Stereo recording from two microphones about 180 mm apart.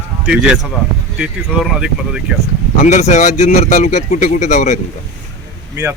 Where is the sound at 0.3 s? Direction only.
5° right (ahead or behind).